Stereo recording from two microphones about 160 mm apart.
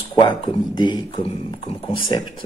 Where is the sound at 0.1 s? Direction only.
25° left (ahead or behind).